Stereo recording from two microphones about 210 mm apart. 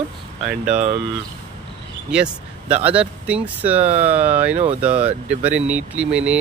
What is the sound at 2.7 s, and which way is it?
Speech, 30° right (ahead or behind).